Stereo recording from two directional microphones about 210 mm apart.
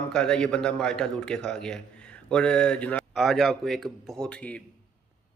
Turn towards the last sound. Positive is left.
turn(degrees=5)  # may be behind; listen again after turning